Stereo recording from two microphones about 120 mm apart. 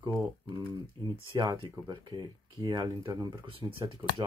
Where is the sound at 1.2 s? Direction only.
40° right (ahead or behind).